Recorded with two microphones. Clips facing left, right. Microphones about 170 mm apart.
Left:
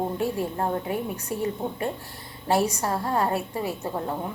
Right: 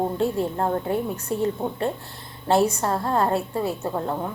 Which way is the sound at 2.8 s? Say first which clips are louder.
Right 3 dB; 40° right (ahead or behind).